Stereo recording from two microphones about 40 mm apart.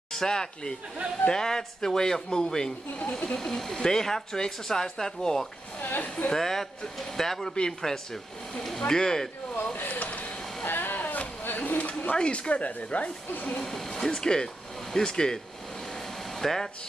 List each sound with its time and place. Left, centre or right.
0.1 s speech: centre
3.3 s speech: centre
5.8 s speech: left
6.3 s speech: centre
9.8 s a sound: left
10.7 s a sound: left
12.2 s speech: left
13.6 s speech: centre